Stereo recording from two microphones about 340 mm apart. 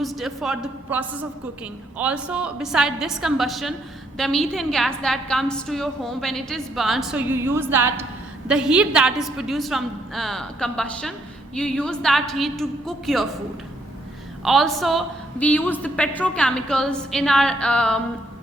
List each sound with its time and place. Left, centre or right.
0.0 s a woman's voice: centre
14.4 s a woman's voice: centre